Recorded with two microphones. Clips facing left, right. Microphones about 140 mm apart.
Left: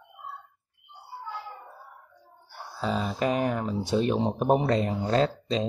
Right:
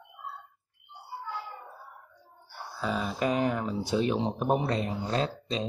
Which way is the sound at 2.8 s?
30° left (ahead or behind).